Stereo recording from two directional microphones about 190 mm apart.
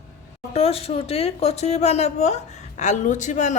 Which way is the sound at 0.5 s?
30° left (ahead or behind).